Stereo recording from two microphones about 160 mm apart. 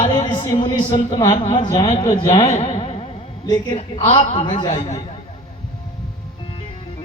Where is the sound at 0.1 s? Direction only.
25° left (ahead or behind).